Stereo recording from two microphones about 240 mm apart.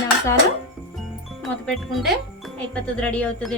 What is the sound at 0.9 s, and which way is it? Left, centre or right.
Speech, centre.